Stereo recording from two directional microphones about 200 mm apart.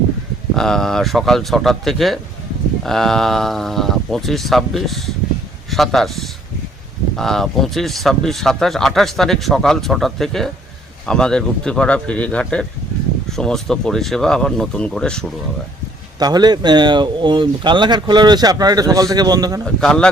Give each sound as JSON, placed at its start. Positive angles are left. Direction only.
{"t": 0.5, "sound": "speech", "side_deg": 0}
{"t": 16.1, "sound": "speech", "side_deg": -20}
{"t": 19.6, "sound": "speech", "side_deg": 5}